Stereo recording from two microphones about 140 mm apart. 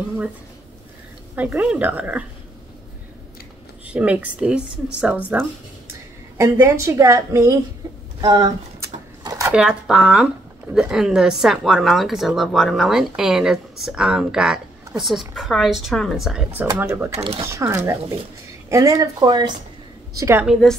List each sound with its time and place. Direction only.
1.3 s a woman's voice: 10° right (ahead or behind)
3.8 s a woman's voice: 10° right (ahead or behind)
6.3 s a woman's voice: 20° right (ahead or behind)
8.2 s a sound: 30° right (ahead or behind)
9.5 s speech: 5° right (ahead or behind)
16.8 s a woman's voice: 15° right (ahead or behind)
17.2 s speech: 40° right (ahead or behind)
17.5 s a woman's voice: 20° right (ahead or behind)
20.2 s a woman's voice: 20° right (ahead or behind)